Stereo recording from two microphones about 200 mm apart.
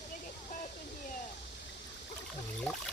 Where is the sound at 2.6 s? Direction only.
Centre (ahead or behind).